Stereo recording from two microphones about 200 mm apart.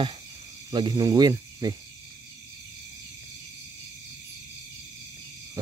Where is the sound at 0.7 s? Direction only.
20° right (ahead or behind).